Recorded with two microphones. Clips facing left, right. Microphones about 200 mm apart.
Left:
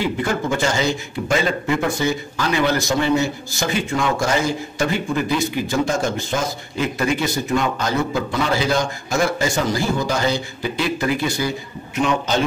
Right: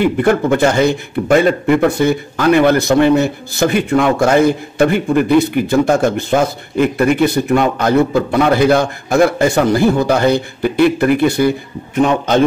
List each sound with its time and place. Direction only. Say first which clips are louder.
0.0 s a man's voice: right 9 dB; 60° right (ahead or behind)